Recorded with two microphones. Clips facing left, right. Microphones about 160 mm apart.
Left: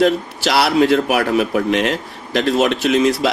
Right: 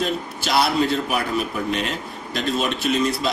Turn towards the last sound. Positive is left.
turn(degrees=90)